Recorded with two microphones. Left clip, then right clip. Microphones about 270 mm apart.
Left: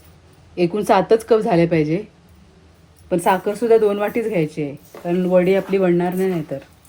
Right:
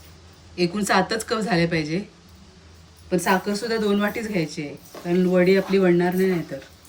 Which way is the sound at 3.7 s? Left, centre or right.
Centre.